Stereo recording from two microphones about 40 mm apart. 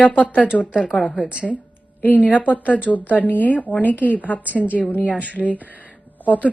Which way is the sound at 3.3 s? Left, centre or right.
Left.